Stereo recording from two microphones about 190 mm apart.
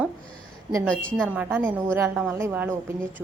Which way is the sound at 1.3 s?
10° right (ahead or behind).